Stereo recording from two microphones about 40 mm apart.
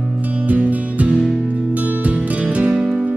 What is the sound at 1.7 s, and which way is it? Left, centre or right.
Music, right.